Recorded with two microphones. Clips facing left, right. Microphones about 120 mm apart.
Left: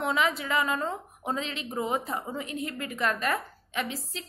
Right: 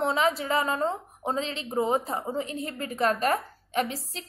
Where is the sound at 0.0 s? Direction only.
35° right (ahead or behind).